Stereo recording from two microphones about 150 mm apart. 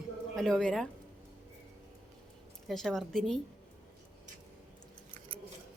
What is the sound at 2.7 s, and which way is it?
Speech, 5° left (ahead or behind).